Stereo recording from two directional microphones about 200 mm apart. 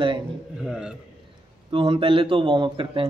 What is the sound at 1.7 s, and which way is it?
A man's voice, 25° right (ahead or behind).